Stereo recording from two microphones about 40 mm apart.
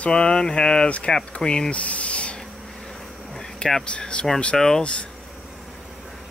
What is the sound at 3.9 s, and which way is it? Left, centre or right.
Speech, left.